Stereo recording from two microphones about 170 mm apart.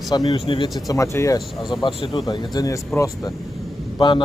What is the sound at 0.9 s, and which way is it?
Speech, 20° left (ahead or behind).